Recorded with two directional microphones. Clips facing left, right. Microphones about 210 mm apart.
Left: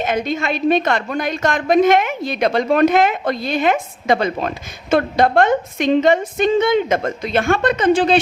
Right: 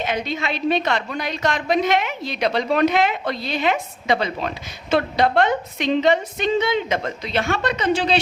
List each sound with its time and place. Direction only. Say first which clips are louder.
0.0 s a woman's voice: left 4 dB; 50° left (ahead or behind)